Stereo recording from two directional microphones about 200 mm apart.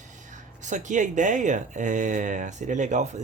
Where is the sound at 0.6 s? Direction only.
40° right (ahead or behind).